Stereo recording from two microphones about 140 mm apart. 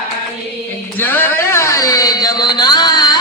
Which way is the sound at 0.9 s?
15° left (ahead or behind).